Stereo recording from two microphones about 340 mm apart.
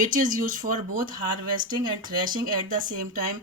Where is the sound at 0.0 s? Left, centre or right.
Right.